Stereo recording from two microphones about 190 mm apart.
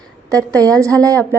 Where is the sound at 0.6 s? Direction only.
15° right (ahead or behind).